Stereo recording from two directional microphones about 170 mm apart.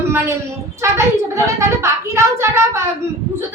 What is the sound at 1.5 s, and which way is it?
A child's voice, 15° right (ahead or behind).